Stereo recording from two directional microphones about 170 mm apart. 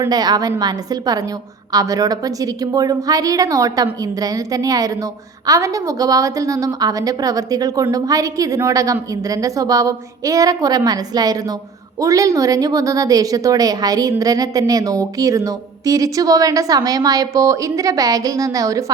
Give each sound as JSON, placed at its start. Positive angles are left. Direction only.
{"t": 0.0, "sound": "a woman's voice", "side_deg": -25}